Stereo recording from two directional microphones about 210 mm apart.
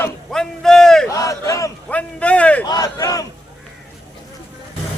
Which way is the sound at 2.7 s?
15° left (ahead or behind).